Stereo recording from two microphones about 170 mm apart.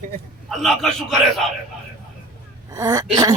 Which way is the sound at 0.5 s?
Centre (ahead or behind).